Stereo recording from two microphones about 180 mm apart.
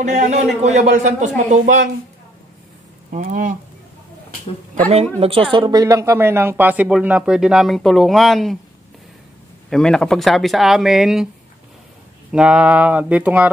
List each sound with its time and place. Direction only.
0.0 s speech: 40° right (ahead or behind)
3.1 s speech: 45° right (ahead or behind)
4.8 s speech: 35° right (ahead or behind)
5.5 s speech: 20° right (ahead or behind); by 8.5 s centre (ahead or behind)
9.7 s speech: 5° left (ahead or behind)
12.3 s speech: 5° right (ahead or behind)